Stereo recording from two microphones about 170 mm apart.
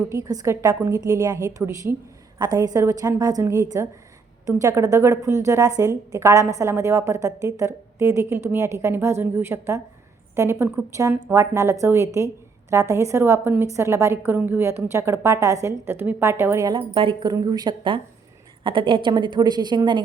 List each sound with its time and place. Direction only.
0.1 s a woman's voice: 20° right (ahead or behind)
16.7 s a woman's voice: 30° right (ahead or behind)